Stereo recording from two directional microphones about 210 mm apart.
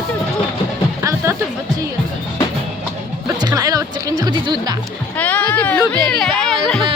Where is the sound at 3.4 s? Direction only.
20° right (ahead or behind).